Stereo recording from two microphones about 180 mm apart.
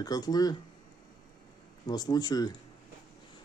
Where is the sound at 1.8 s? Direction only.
20° left (ahead or behind).